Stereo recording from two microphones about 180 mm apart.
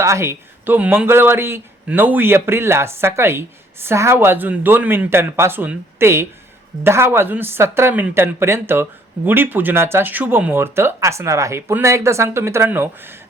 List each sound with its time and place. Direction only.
0.0 s speech: 15° right (ahead or behind)